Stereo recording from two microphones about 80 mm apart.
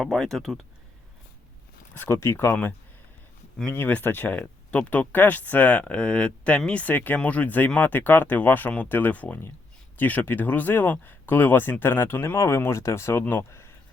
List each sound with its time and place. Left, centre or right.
0.0 s speech: centre
1.9 s speech: left
3.8 s speech: left